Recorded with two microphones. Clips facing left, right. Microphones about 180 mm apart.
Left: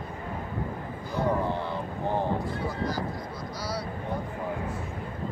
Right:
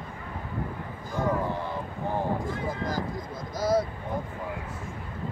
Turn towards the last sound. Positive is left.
turn(degrees=-50)  # may be behind; listen again after turning